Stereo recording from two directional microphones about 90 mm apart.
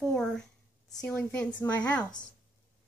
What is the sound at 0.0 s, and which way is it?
A woman's voice, 5° left (ahead or behind).